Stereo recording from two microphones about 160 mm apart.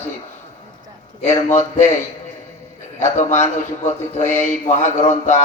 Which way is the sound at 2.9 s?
45° left (ahead or behind).